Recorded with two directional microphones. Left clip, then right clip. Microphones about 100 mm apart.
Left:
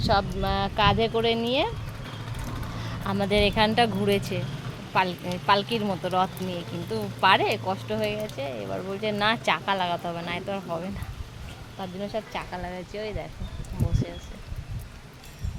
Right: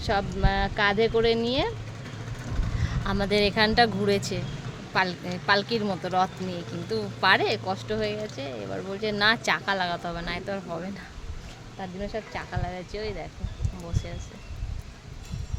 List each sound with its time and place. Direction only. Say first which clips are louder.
0.1 s speech: left 1 dB; 30° right (ahead or behind)
2.8 s speech: even; 20° right (ahead or behind)
11.8 s speech: left 2 dB; 15° right (ahead or behind)